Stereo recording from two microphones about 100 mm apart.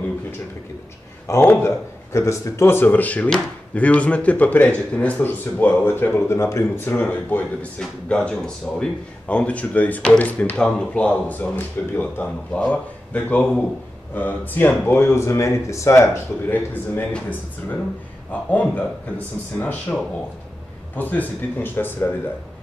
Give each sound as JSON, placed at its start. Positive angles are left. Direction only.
{"t": 1.2, "sound": "speech", "side_deg": 25}
{"t": 16.4, "sound": "speech", "side_deg": 20}
{"t": 20.9, "sound": "speech", "side_deg": 15}